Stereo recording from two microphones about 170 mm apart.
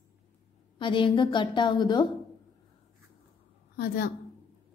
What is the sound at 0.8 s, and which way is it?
A woman's voice, 30° left (ahead or behind).